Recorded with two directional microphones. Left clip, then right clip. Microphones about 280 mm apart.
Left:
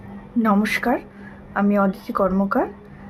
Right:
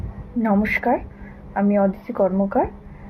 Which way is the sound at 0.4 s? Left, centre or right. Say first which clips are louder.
Even; centre.